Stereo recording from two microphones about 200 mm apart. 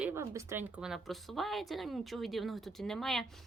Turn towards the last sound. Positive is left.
turn(degrees=0)  # may be behind; listen again after turning